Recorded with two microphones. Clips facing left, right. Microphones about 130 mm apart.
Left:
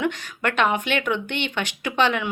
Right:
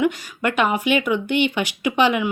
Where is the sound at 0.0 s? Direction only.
10° right (ahead or behind).